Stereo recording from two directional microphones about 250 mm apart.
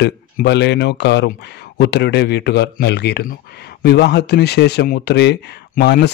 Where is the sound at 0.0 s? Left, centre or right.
Left.